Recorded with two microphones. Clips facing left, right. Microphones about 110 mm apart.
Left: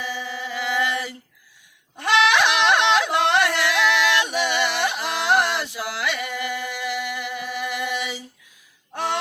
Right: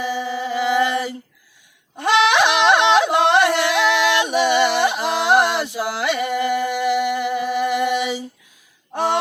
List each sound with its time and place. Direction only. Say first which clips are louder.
0.0 s chant: right 7 dB; 25° right (ahead or behind)
2.0 s yodeling: right 3 dB; 25° right (ahead or behind)
2.9 s singing: right 4 dB; 25° right (ahead or behind)
8.9 s gasp: right 6 dB; 25° right (ahead or behind)